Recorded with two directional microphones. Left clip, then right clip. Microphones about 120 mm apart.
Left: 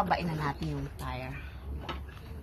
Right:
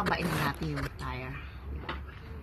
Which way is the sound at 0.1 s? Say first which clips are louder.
Even; 25° left (ahead or behind).